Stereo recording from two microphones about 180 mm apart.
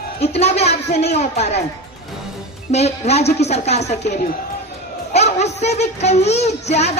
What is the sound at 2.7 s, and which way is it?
Speech, 35° left (ahead or behind).